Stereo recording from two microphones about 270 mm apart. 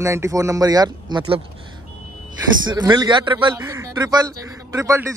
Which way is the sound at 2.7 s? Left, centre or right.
Centre.